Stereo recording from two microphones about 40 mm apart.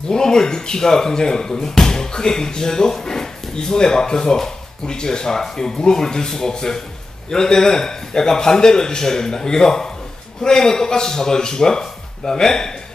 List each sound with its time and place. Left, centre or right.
0.1 s speech: centre